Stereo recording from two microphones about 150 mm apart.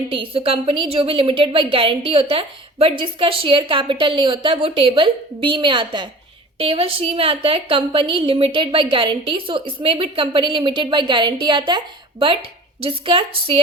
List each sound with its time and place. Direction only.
0.1 s a woman's voice: 35° right (ahead or behind)
12.8 s a woman's voice: 35° right (ahead or behind)